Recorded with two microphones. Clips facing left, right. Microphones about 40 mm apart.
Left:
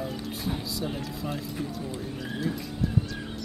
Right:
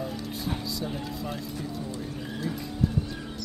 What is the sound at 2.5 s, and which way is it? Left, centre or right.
Speech, centre.